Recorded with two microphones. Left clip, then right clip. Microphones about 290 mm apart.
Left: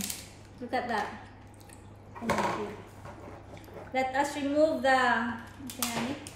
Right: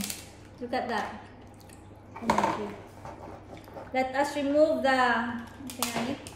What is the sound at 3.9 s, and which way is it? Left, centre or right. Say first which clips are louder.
A woman's voice: right 1 dB; centre.